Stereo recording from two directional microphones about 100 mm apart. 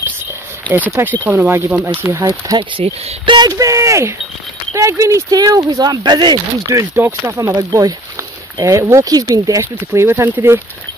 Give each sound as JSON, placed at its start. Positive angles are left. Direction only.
{"t": 0.7, "sound": "speech", "side_deg": -20}
{"t": 2.1, "sound": "speech", "side_deg": -30}
{"t": 2.8, "sound": "speech", "side_deg": -80}
{"t": 3.3, "sound": "speech", "side_deg": -40}
{"t": 7.0, "sound": "speech", "side_deg": -20}
{"t": 7.3, "sound": "speech", "side_deg": -35}